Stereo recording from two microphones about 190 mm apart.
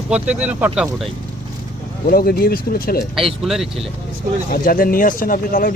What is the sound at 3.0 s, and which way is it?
Speech, centre (ahead or behind).